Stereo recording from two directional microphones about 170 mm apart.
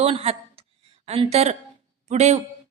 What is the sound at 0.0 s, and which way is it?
A woman's voice, 35° right (ahead or behind).